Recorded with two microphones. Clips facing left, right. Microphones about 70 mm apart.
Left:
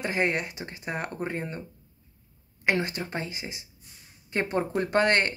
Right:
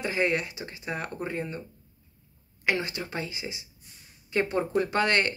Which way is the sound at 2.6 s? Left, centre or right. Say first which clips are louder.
Left 2 dB; left.